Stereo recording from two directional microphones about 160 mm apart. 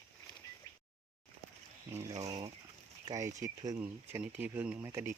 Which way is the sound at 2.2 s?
25° right (ahead or behind).